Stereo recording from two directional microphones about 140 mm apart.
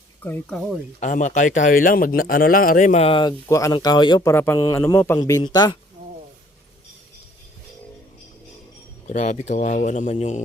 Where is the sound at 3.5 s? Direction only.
20° left (ahead or behind).